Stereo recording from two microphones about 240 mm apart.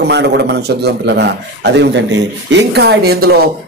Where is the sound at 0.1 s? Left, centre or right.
Right.